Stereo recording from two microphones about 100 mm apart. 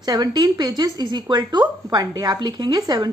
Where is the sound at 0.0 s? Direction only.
40° right (ahead or behind).